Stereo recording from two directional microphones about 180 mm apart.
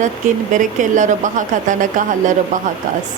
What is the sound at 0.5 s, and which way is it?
A woman's voice, 45° right (ahead or behind).